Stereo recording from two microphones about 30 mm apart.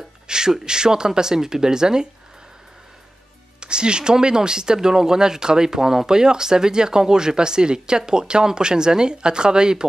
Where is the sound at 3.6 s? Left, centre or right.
Right.